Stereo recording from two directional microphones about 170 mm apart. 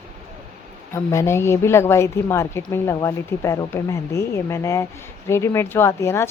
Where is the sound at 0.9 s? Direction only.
15° left (ahead or behind).